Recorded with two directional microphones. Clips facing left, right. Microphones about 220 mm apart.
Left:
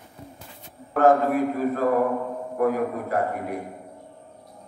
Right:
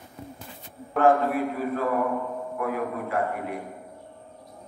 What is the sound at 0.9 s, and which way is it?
A man's voice, 45° left (ahead or behind).